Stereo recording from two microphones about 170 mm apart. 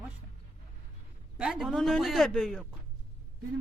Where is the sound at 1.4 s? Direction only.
5° right (ahead or behind).